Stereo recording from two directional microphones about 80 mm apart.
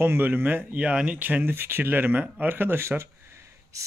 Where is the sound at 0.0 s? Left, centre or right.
Right.